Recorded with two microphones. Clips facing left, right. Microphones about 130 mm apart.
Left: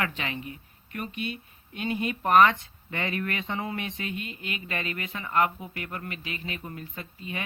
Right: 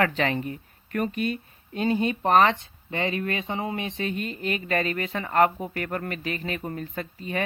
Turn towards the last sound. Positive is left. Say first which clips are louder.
# right 6 dB
turn(degrees=-40)  # may be behind; listen again after turning